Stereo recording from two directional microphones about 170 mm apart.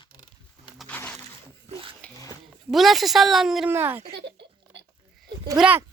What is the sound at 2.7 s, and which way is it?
Speech, centre (ahead or behind).